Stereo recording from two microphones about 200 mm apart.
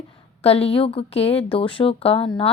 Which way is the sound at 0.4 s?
30° left (ahead or behind).